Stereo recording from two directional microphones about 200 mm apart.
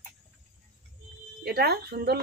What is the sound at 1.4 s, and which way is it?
Speech, 50° right (ahead or behind).